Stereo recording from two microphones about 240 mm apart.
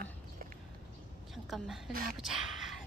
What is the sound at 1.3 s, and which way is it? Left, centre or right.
Speech, centre.